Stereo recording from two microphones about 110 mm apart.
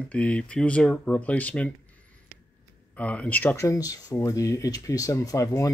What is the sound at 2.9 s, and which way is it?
Speech, 10° left (ahead or behind).